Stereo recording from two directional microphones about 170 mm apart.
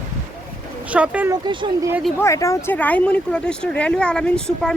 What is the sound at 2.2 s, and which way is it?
Speech, 15° left (ahead or behind).